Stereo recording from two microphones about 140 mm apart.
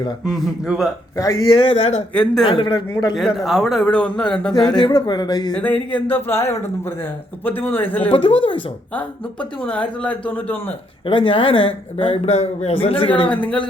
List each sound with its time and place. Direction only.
0.3 s a man's voice: 5° right (ahead or behind)
1.1 s speech: 25° left (ahead or behind); by 2.0 s 45° left (ahead or behind)
2.1 s a man's voice: 5° left (ahead or behind)
2.4 s speech: 40° left (ahead or behind)
3.2 s a man's voice: centre (ahead or behind)
4.8 s speech: 30° left (ahead or behind)
5.9 s a man's voice: 15° left (ahead or behind)
8.1 s speech: 40° left (ahead or behind)
8.9 s a man's voice: 10° left (ahead or behind)
11.0 s speech: 35° left (ahead or behind)
13.3 s a man's voice: 10° left (ahead or behind)